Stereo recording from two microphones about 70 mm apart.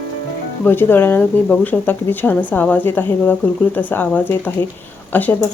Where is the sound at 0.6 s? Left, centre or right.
Left.